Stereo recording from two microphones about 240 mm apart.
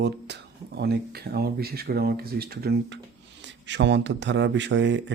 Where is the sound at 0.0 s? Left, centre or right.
Right.